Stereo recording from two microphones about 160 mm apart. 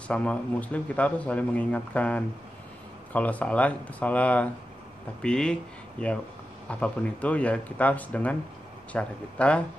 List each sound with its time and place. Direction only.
0.1 s speech: 10° left (ahead or behind)